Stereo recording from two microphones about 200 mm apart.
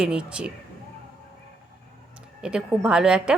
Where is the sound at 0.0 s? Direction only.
5° right (ahead or behind).